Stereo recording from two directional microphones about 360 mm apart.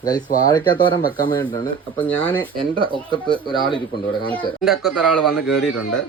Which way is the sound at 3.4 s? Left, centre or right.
Centre.